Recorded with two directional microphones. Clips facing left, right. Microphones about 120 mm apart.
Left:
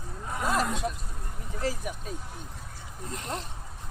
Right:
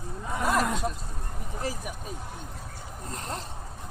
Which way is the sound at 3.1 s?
35° right (ahead or behind).